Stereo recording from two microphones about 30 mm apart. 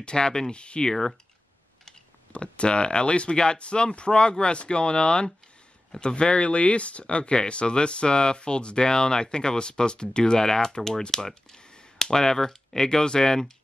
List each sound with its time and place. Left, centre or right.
0.0 s speech: left
0.6 s speech: left
2.3 s speech: left